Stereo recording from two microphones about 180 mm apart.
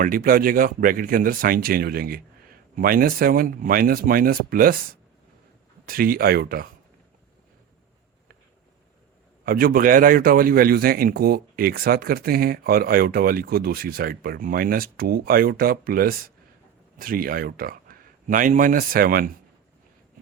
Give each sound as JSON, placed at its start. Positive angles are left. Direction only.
{"t": 0.0, "sound": "speech", "side_deg": -50}
{"t": 5.9, "sound": "a man's voice", "side_deg": -55}
{"t": 9.4, "sound": "a man's voice", "side_deg": -55}